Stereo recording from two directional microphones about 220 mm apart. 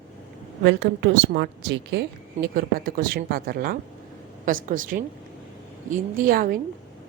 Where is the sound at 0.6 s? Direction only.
50° right (ahead or behind).